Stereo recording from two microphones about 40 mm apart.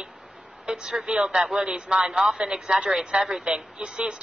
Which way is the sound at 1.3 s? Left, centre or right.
Centre.